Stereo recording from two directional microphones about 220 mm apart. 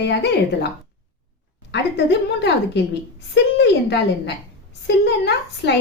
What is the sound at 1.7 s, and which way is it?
Speech, 50° left (ahead or behind).